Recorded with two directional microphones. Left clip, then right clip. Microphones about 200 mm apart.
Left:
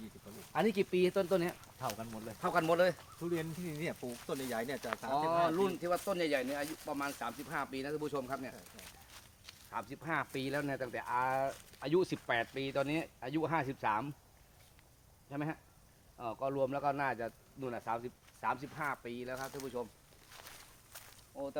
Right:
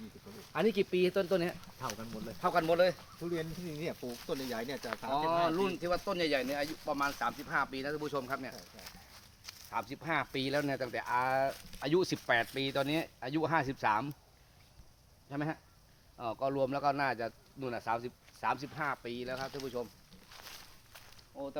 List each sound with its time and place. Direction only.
0.5 s speech: 10° right (ahead or behind)
2.4 s speech: centre (ahead or behind)
3.2 s speech: 20° left (ahead or behind)
4.4 s speech: 10° left (ahead or behind)
4.8 s speech: 15° right (ahead or behind); by 6.0 s 35° right (ahead or behind)
6.1 s speech: 50° right (ahead or behind)
7.2 s speech: 25° right (ahead or behind)
8.8 s a sound: 45° left (ahead or behind)
9.4 s speech: 35° right (ahead or behind); by 14.1 s 60° right (ahead or behind)
15.3 s speech: 60° right (ahead or behind)
20.9 s walk: 10° right (ahead or behind)